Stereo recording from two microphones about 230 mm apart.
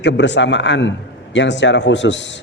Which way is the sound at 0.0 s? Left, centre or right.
Left.